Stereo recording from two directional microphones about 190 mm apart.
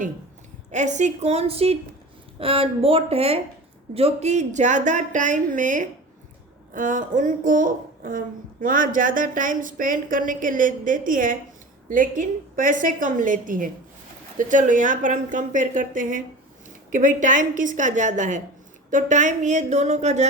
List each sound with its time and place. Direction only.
0.7 s a woman's voice: 40° right (ahead or behind)